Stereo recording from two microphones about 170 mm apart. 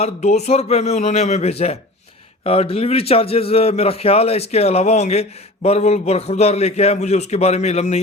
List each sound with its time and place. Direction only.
0.0 s a man's voice: 40° left (ahead or behind)